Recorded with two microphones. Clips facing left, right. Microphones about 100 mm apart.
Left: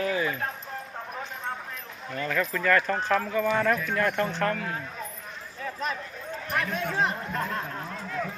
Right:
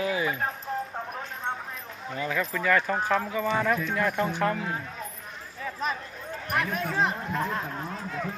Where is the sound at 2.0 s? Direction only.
15° right (ahead or behind).